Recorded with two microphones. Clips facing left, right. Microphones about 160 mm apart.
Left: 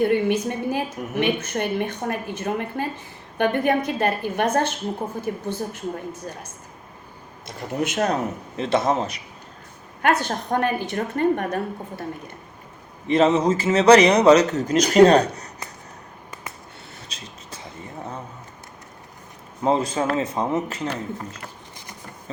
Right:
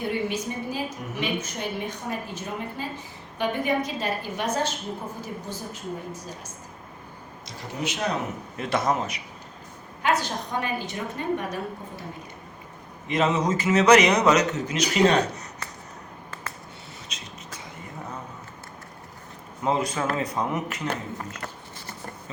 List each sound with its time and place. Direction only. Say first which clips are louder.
0.0 s a woman's voice: left 8 dB; 60° left (ahead or behind)
7.4 s speech: left 6 dB; 50° left (ahead or behind)
8.5 s a man's voice: left 4 dB; 25° left (ahead or behind)
10.0 s a woman's voice: left 4 dB; 55° left (ahead or behind)
13.1 s a man's voice: left 6 dB; 30° left (ahead or behind)
17.1 s vehicle: left 1 dB; 30° left (ahead or behind)
19.6 s a man's voice: left 4 dB; 30° left (ahead or behind)